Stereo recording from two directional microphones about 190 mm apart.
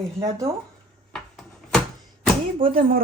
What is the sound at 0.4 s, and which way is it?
Speech, 30° right (ahead or behind).